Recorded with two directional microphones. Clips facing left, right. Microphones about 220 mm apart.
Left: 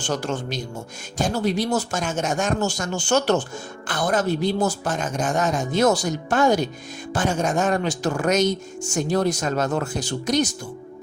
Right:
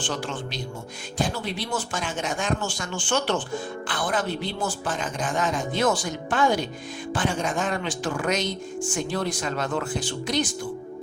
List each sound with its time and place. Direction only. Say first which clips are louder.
0.0 s speech: left 4 dB; 45° left (ahead or behind)